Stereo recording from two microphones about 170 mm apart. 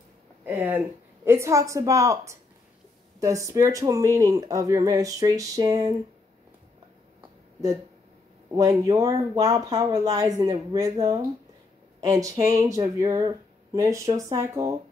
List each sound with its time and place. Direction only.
0.5 s a woman's voice: 10° right (ahead or behind)
8.5 s speech: 20° right (ahead or behind)